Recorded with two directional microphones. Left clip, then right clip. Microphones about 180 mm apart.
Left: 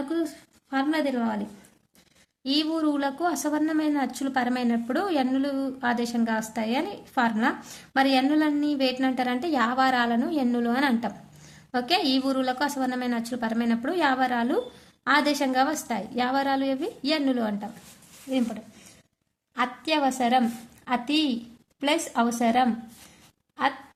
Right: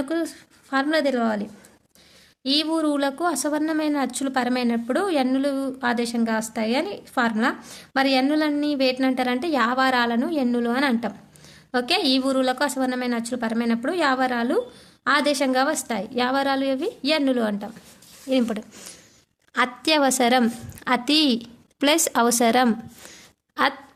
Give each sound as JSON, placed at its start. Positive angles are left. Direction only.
{"t": 0.7, "sound": "a woman's voice", "side_deg": -20}
{"t": 18.3, "sound": "a woman's voice", "side_deg": -45}